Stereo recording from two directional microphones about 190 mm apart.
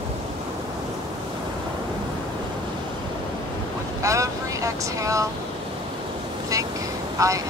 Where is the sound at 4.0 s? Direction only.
15° right (ahead or behind).